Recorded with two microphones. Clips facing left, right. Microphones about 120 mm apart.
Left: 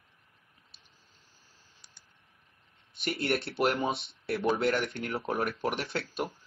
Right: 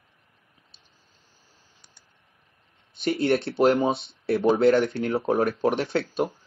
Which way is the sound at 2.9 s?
30° right (ahead or behind).